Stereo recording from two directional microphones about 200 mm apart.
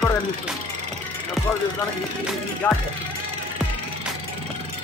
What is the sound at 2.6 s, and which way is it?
Speech, 5° left (ahead or behind).